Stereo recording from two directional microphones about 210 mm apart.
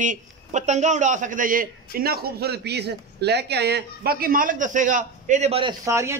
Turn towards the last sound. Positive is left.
turn(degrees=-15)  # may be behind; listen again after turning